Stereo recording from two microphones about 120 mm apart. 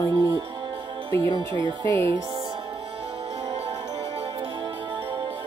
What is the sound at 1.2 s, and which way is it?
Speech, 40° right (ahead or behind).